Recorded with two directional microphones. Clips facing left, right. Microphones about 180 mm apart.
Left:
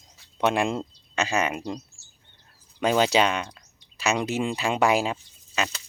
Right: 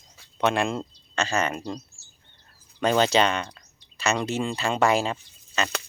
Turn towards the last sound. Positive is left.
turn(degrees=5)  # may be behind; listen again after turning